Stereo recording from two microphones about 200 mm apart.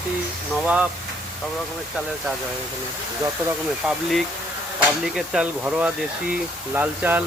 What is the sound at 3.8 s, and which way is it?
Speech, centre (ahead or behind).